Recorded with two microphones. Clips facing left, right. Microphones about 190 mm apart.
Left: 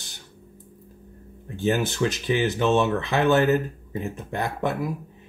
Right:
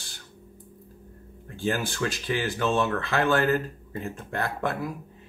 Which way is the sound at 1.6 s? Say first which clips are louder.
Left 5 dB; 20° left (ahead or behind).